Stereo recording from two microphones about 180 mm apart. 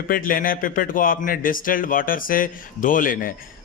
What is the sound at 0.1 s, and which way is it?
A man's voice, 50° left (ahead or behind).